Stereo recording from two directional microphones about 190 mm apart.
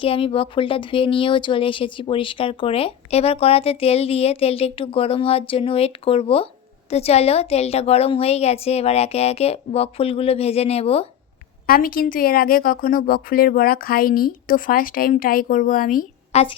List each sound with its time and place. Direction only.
0.0 s a woman's voice: 30° left (ahead or behind)
11.6 s speech: 50° left (ahead or behind)